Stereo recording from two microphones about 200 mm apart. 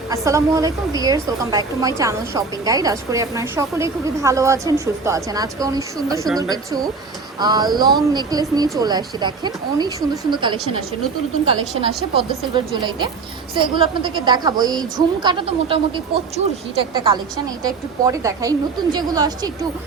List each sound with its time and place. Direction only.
0.1 s a woman's voice: 15° right (ahead or behind)
17.6 s a woman's voice: 15° right (ahead or behind)